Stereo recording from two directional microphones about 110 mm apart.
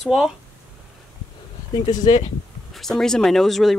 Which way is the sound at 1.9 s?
40° left (ahead or behind).